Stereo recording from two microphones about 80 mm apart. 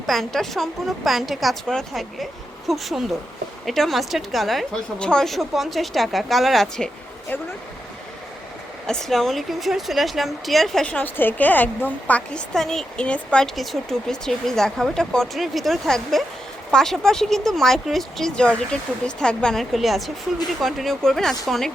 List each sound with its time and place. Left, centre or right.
0.0 s speech: centre
8.9 s speech: centre
10.8 s speech: centre
12.5 s speech: centre